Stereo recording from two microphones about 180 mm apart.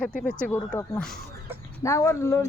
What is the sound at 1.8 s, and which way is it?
Speech, 15° left (ahead or behind).